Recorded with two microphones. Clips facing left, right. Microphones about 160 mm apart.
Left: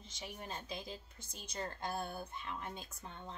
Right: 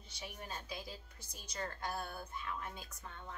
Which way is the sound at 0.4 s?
25° left (ahead or behind).